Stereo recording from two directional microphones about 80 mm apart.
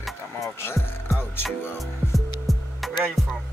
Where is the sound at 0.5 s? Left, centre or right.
Left.